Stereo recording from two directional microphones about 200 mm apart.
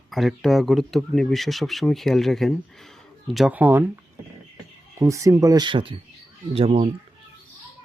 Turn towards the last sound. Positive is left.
turn(degrees=-30)  # may be behind; listen again after turning